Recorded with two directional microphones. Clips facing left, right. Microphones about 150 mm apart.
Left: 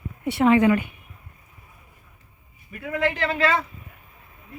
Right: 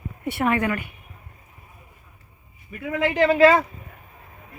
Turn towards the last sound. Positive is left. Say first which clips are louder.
# right 5 dB
turn(degrees=-10)  # may be behind; listen again after turning